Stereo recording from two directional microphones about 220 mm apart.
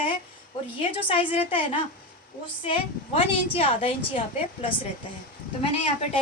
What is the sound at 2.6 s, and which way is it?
A woman's voice, 25° left (ahead or behind).